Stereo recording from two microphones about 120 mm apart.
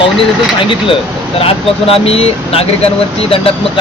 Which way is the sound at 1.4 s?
55° left (ahead or behind).